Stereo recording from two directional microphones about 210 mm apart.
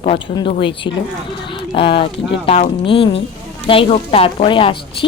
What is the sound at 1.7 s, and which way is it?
Speech, 25° left (ahead or behind).